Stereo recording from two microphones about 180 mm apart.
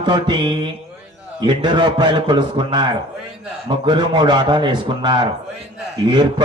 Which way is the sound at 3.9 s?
25° right (ahead or behind).